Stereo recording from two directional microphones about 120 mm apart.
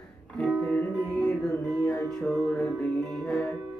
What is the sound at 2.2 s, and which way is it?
Music, 20° left (ahead or behind).